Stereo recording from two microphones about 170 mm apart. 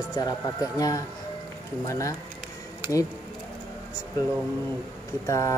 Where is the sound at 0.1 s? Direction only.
20° left (ahead or behind).